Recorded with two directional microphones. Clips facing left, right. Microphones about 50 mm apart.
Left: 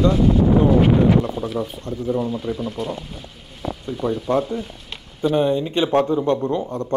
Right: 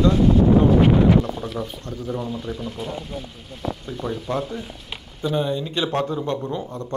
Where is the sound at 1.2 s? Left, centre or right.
Centre.